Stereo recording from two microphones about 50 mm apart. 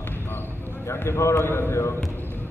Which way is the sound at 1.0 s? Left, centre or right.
Left.